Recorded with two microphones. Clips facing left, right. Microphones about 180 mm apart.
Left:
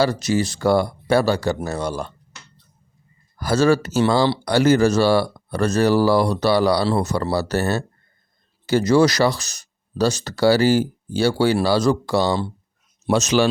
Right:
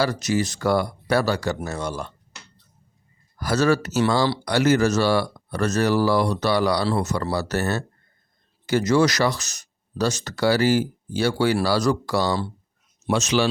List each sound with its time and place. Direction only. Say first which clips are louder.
0.0 s speech: left 3 dB; 30° left (ahead or behind)
3.4 s speech: left 3 dB; 30° left (ahead or behind)
13.1 s speech: left 3 dB; 40° left (ahead or behind)